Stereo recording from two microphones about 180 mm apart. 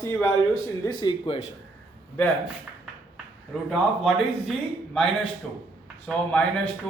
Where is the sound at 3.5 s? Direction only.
Centre (ahead or behind).